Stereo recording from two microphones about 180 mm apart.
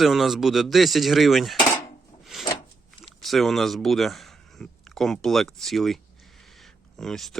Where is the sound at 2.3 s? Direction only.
Centre (ahead or behind).